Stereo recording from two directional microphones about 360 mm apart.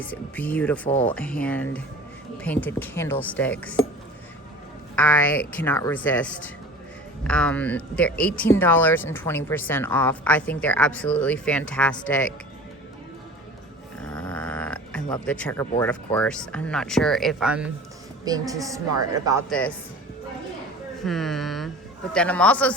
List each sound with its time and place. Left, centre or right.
0.0 s speech: centre
4.9 s speech: centre
14.0 s a sound: centre
15.8 s speech: centre
19.5 s speech: centre
21.0 s speech: centre